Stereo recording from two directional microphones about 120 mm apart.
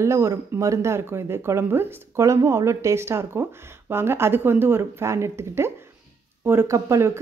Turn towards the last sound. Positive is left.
turn(degrees=-25)  # may be behind; listen again after turning